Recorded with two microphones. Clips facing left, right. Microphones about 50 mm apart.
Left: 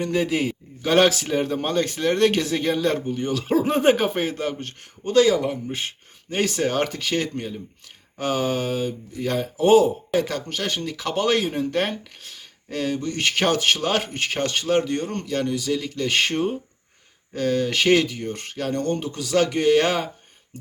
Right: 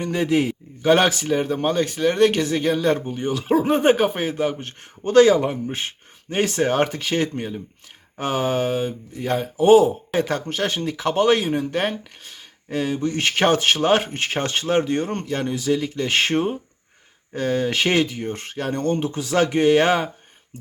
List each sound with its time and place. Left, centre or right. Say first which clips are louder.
0.0 s a man's voice: right 2 dB; centre
3.1 s a man's voice: right 1 dB; centre
5.0 s a man's voice: right 4 dB; right; by 9.9 s centre
10.1 s speech: right 1 dB; right